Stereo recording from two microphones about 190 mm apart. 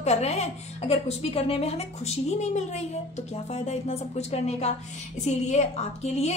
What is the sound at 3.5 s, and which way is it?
A woman's voice, 35° left (ahead or behind).